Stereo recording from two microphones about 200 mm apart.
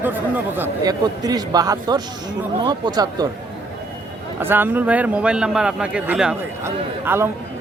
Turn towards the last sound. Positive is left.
turn(degrees=-10)  # may be behind; listen again after turning